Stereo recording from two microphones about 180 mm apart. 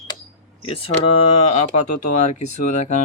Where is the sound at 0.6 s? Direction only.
30° left (ahead or behind).